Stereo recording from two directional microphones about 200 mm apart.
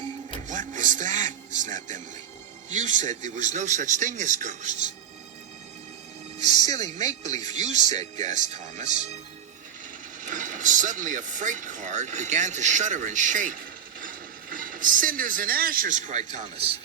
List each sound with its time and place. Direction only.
0.3 s music: 40° right (ahead or behind)
2.7 s a man's voice: 35° right (ahead or behind)
6.4 s a man's voice: 35° right (ahead or behind)
10.2 s speech: 40° right (ahead or behind)